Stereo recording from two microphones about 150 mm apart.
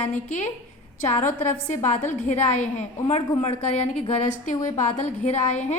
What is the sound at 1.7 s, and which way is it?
A woman's voice, 55° left (ahead or behind).